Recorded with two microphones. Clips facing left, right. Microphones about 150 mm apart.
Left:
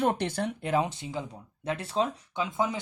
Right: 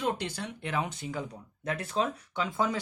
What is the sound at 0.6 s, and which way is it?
Speech, 35° left (ahead or behind).